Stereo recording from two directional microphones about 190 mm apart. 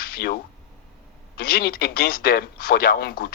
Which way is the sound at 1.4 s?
50° left (ahead or behind).